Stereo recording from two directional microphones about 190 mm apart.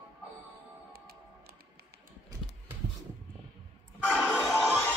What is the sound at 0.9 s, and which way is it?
Music, 55° right (ahead or behind).